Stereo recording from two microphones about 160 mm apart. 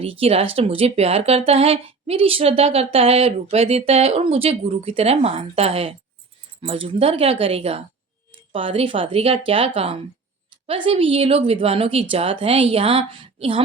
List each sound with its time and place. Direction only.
0.0 s speech: 35° right (ahead or behind)